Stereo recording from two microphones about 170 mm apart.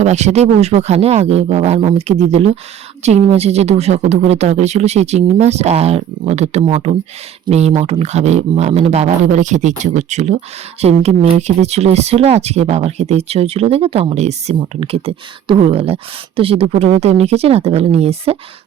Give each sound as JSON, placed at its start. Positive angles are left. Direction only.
{"t": 0.0, "sound": "a man's voice", "side_deg": -40}